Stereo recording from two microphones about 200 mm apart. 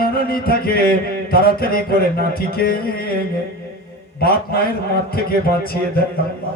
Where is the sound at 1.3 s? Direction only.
50° left (ahead or behind).